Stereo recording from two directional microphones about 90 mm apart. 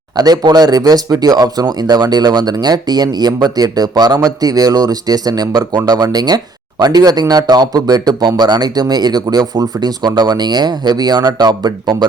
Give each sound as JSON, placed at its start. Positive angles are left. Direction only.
{"t": 0.2, "sound": "speech", "side_deg": -50}